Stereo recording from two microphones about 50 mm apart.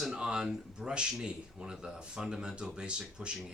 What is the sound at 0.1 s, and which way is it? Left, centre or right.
Speech, centre.